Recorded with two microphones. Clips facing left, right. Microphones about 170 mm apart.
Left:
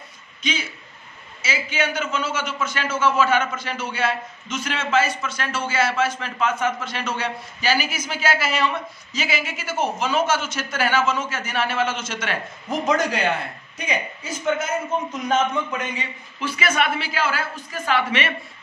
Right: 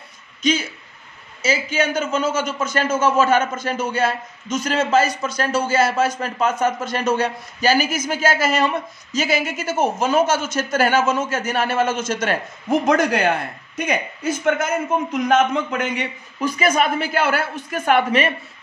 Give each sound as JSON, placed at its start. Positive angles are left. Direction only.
{"t": 0.4, "sound": "a man's voice", "side_deg": -40}
{"t": 12.8, "sound": "a man's voice", "side_deg": -60}
{"t": 15.1, "sound": "a man's voice", "side_deg": -65}
{"t": 16.3, "sound": "a man's voice", "side_deg": -45}